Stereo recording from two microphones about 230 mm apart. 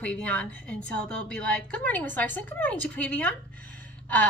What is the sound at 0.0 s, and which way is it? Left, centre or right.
A woman's voice, centre.